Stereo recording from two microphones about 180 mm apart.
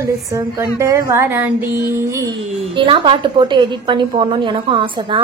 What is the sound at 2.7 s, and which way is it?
A woman's voice, 30° right (ahead or behind).